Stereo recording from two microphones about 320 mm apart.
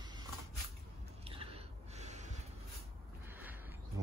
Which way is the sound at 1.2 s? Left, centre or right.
Centre.